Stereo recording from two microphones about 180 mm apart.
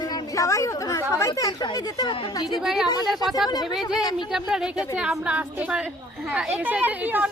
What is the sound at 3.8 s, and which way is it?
Speech, 25° left (ahead or behind).